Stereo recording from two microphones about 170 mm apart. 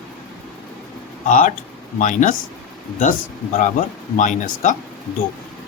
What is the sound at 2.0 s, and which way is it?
Speech, 50° left (ahead or behind).